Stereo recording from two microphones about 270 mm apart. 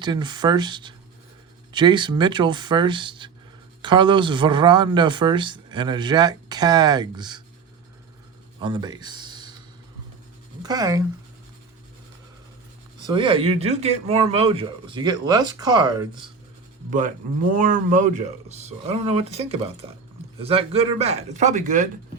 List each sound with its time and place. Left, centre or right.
0.0 s speech: centre
8.6 s speech: centre
10.6 s speech: centre
13.1 s speech: centre
17.5 s speech: right